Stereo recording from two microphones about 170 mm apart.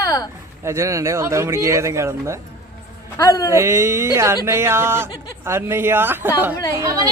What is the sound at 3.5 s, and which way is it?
A woman's voice, 15° right (ahead or behind).